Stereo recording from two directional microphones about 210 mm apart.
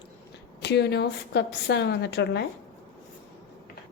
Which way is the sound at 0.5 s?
55° left (ahead or behind).